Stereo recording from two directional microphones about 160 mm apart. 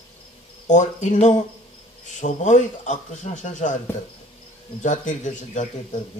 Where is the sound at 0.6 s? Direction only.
50° left (ahead or behind).